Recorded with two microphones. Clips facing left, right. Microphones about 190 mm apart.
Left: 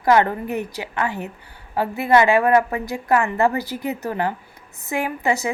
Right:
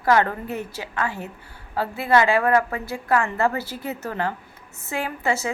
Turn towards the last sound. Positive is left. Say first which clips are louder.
# left 3 dB
turn(degrees=15)  # may be behind; listen again after turning